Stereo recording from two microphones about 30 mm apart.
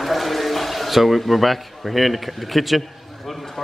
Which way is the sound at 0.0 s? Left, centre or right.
Centre.